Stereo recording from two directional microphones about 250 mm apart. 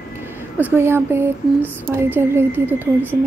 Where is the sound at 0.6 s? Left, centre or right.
Centre.